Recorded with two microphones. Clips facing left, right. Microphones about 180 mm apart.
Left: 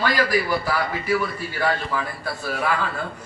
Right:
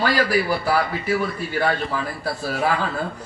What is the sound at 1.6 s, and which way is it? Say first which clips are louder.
Speech: right 1 dB; 35° right (ahead or behind).